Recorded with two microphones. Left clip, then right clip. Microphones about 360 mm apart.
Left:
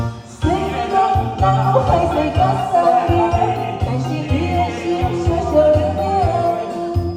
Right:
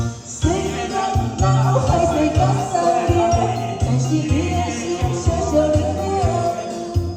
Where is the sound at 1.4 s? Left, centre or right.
Left.